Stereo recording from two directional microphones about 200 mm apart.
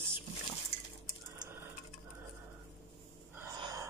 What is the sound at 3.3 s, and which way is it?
Gasp, 15° right (ahead or behind).